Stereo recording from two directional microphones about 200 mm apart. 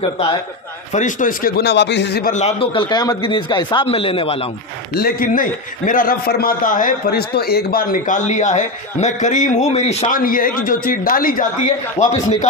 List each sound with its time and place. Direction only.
0.9 s a man's voice: 40° left (ahead or behind)
2.3 s speech: 30° left (ahead or behind)
4.9 s a man's voice: 45° left (ahead or behind)